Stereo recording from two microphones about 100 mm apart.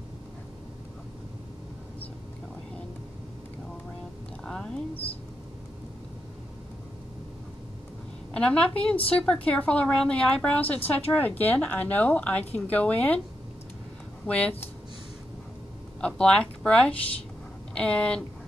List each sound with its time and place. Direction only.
4.5 s a sound: 5° left (ahead or behind)
8.3 s a woman's voice: 10° left (ahead or behind)
14.2 s a woman's voice: 15° left (ahead or behind)
16.0 s a woman's voice: 10° left (ahead or behind)